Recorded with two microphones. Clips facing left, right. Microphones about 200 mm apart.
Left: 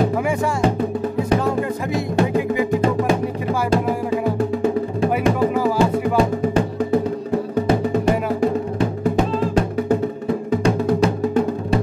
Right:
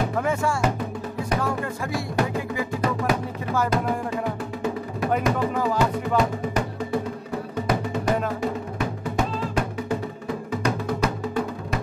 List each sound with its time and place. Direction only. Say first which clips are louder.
2.1 s music: left 8 dB; 25° left (ahead or behind)
5.8 s music: left 4 dB; 30° left (ahead or behind)
8.7 s music: left 7 dB; 30° left (ahead or behind)